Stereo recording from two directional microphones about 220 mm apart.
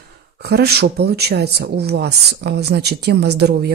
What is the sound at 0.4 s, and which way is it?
Speech, 45° right (ahead or behind).